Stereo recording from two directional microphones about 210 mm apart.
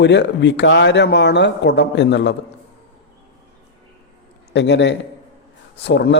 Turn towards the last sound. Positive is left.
turn(degrees=55)  # may be behind; listen again after turning